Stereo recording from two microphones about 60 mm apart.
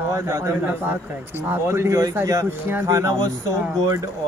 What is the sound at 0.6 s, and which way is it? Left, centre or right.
Speech, right.